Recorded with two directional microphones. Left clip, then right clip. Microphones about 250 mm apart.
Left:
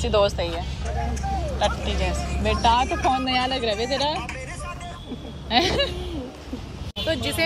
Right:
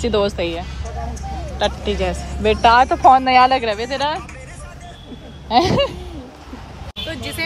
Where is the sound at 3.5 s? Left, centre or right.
Centre.